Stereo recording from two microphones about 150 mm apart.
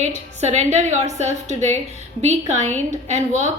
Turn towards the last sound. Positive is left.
turn(degrees=-50)  # may be behind; listen again after turning